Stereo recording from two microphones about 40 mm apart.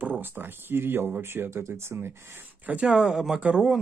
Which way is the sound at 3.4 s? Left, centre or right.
Right.